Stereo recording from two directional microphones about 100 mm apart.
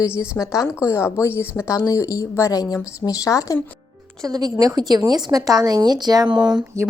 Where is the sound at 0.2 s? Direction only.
30° left (ahead or behind).